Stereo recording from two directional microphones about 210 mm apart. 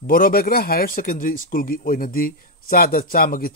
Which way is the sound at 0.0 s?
40° left (ahead or behind).